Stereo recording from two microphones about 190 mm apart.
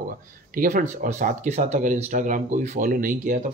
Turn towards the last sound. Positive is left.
turn(degrees=-45)  # may be behind; listen again after turning